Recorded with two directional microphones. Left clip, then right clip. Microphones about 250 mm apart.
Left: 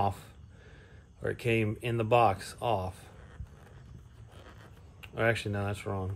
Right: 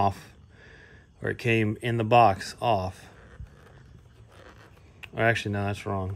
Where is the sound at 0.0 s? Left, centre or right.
Right.